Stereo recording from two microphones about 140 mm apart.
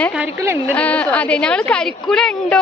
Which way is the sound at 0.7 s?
10° left (ahead or behind).